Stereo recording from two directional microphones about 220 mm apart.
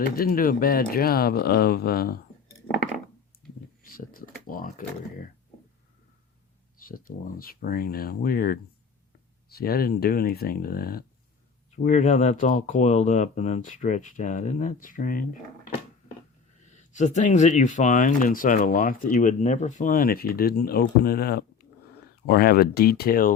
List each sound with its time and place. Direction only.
0.0 s speech: 40° left (ahead or behind)
3.9 s a sound: 40° left (ahead or behind)
6.7 s speech: 40° left (ahead or behind)
16.6 s speech: 35° left (ahead or behind)